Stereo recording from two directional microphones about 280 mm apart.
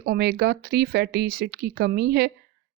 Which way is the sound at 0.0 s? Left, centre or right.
Right.